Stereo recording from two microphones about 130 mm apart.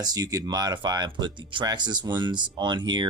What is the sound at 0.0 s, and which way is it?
Speech, 30° right (ahead or behind).